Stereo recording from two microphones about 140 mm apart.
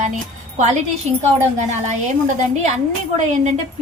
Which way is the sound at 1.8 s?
55° right (ahead or behind).